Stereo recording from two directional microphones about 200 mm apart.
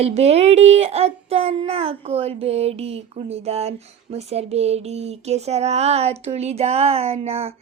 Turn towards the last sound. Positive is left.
turn(degrees=-30)  # may be behind; listen again after turning